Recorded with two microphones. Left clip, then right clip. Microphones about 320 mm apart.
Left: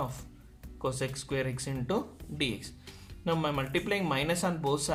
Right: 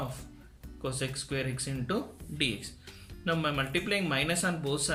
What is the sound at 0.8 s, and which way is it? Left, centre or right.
Speech, centre.